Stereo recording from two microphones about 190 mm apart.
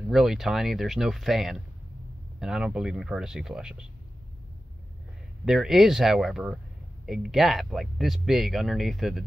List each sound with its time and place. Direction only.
0.1 s speech: centre (ahead or behind)
5.4 s speech: centre (ahead or behind)